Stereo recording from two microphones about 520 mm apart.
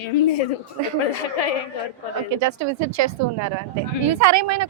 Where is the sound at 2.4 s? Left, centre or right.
Right.